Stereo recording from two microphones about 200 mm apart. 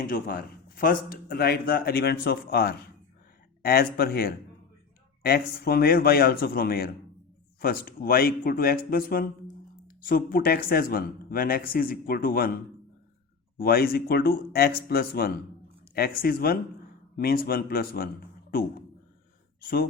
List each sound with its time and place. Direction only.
0.0 s a man's voice: 45° left (ahead or behind)
13.6 s a man's voice: 50° left (ahead or behind)
19.6 s a man's voice: 50° left (ahead or behind)